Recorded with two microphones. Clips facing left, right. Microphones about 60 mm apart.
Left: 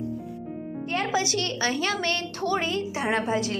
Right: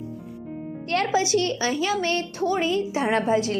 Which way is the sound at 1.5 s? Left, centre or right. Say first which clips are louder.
Right 2 dB; left.